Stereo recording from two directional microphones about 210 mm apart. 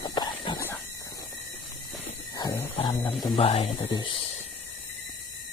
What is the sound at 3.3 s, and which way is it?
Speech, 30° left (ahead or behind).